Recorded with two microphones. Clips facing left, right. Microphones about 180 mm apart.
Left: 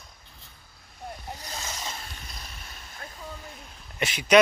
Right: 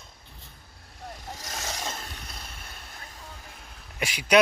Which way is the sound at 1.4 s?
80° right.